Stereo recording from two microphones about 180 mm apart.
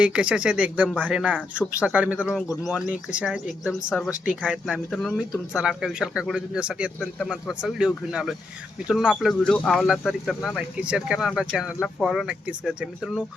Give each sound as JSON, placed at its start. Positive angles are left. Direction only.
{"t": 0.0, "sound": "speech", "side_deg": -5}